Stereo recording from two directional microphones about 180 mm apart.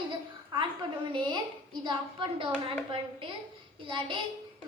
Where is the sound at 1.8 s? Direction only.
25° right (ahead or behind).